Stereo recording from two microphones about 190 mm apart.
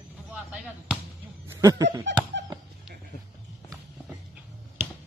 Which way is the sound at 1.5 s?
15° right (ahead or behind).